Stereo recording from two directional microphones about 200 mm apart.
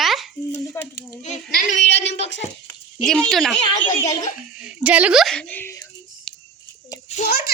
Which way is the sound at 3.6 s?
20° left (ahead or behind).